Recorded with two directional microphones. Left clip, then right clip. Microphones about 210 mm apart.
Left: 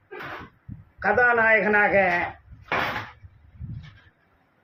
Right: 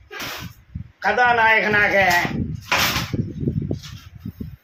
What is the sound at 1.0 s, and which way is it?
A man's voice, 20° right (ahead or behind).